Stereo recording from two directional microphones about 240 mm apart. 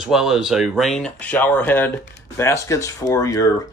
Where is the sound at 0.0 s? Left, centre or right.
Centre.